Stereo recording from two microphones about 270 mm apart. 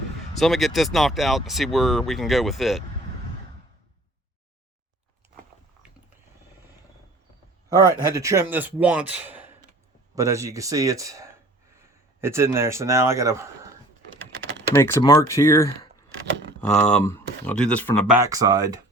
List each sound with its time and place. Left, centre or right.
0.3 s speech: centre
7.7 s a man's voice: centre
14.8 s speech: centre